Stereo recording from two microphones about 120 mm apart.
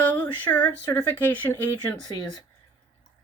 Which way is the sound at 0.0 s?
15° left (ahead or behind).